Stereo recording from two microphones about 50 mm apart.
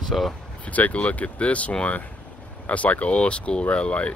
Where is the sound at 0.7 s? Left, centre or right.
Left.